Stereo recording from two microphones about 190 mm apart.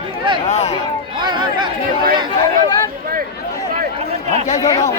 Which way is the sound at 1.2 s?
25° right (ahead or behind).